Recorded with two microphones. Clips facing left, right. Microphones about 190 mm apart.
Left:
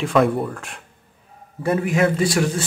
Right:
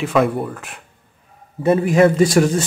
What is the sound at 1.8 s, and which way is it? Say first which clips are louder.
Speech: right 6 dB; 40° right (ahead or behind).